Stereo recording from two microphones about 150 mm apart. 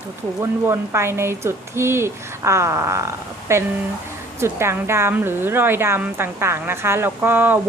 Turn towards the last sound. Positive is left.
turn(degrees=-10)  # may be behind; listen again after turning